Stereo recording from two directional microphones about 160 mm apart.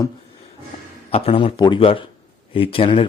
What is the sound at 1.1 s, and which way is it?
Speech, 35° left (ahead or behind).